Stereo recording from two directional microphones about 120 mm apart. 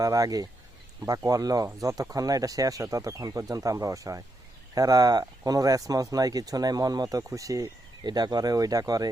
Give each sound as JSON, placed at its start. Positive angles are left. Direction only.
{"t": 0.0, "sound": "speech", "side_deg": -30}